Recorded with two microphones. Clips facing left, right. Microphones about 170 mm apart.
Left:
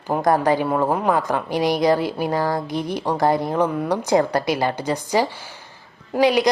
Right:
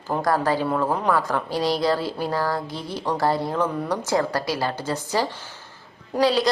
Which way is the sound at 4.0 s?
20° left (ahead or behind).